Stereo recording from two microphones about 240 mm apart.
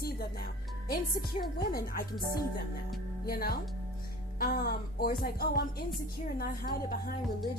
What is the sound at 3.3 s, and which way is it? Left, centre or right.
Speech, left.